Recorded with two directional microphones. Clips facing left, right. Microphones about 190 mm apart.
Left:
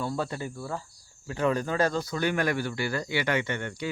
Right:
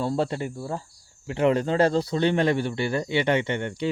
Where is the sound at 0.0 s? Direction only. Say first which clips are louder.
Right 5 dB; 30° right (ahead or behind).